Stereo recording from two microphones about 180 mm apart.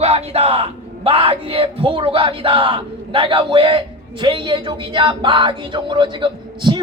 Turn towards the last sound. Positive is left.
turn(degrees=-25)  # may be behind; listen again after turning